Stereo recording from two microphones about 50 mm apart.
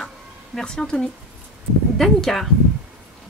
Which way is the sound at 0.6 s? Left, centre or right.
Centre.